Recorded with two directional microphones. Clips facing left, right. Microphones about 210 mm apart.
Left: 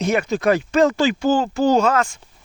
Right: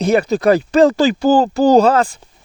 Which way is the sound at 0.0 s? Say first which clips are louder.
Right 5 dB; 35° right (ahead or behind).